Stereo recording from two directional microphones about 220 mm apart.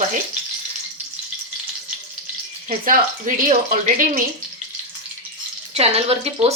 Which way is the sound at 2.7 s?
35° right (ahead or behind).